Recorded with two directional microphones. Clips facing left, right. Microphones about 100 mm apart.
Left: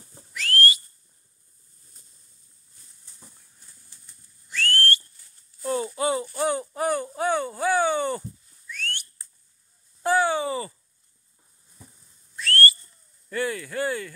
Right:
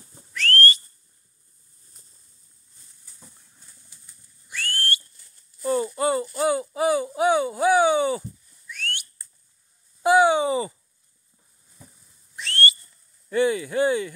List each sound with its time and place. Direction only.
0.3 s whistle: 10° left (ahead or behind)
4.5 s whistle: 10° right (ahead or behind)
5.6 s a sound: centre (ahead or behind)
6.2 s speech: 5° right (ahead or behind)
10.0 s a sound: 15° right (ahead or behind)
12.4 s whistle: 20° right (ahead or behind)
13.3 s speech: 20° right (ahead or behind)